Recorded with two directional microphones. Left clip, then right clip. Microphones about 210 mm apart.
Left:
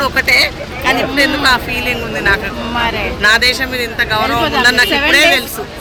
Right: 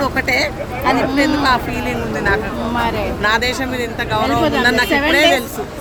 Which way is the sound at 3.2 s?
15° right (ahead or behind).